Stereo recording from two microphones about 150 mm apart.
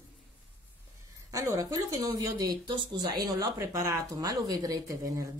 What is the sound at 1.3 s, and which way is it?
A woman's voice, 20° right (ahead or behind).